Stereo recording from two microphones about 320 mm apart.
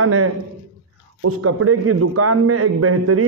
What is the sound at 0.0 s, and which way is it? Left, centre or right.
A man's voice, right.